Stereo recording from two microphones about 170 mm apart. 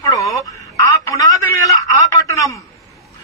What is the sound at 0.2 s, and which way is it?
Telephone, 20° left (ahead or behind).